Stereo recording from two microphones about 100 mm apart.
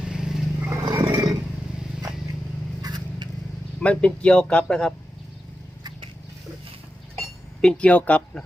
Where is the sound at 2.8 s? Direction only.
40° right (ahead or behind).